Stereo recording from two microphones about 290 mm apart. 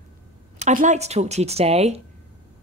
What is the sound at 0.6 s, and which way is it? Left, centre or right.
A woman's voice, right.